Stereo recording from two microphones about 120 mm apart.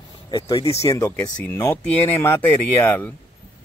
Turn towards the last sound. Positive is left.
turn(degrees=15)  # may be behind; listen again after turning